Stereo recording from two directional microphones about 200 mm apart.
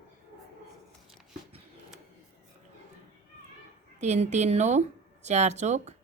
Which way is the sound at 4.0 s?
35° right (ahead or behind).